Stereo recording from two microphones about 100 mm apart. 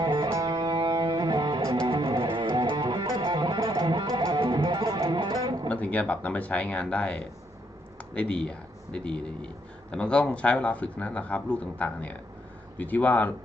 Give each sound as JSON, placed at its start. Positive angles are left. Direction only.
{"t": 0.0, "sound": "music", "side_deg": -50}
{"t": 0.3, "sound": "music", "side_deg": -40}
{"t": 5.6, "sound": "speech", "side_deg": 15}